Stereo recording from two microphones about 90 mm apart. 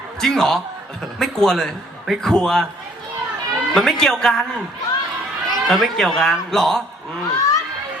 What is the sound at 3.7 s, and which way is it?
Mantra, 5° left (ahead or behind).